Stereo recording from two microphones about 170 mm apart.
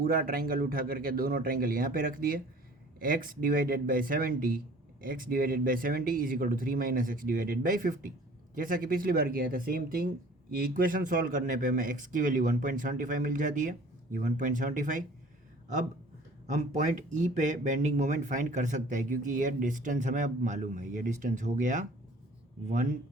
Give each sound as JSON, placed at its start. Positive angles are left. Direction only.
{"t": 0.0, "sound": "speech", "side_deg": -60}
{"t": 16.5, "sound": "speech", "side_deg": -45}